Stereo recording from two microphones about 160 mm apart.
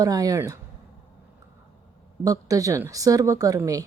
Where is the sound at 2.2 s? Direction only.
20° right (ahead or behind).